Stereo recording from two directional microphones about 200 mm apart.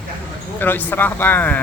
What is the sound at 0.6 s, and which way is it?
Speech, 10° left (ahead or behind).